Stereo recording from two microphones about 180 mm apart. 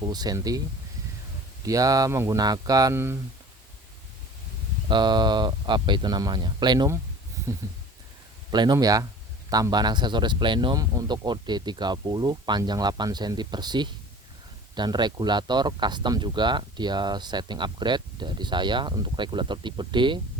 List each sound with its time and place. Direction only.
0.0 s speech: 20° right (ahead or behind)
1.6 s speech: 20° right (ahead or behind)
4.9 s speech: 25° right (ahead or behind)
8.4 s speech: 25° right (ahead or behind)